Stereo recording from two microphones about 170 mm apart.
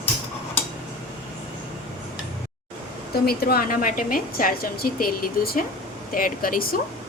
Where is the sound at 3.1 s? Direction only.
65° left (ahead or behind).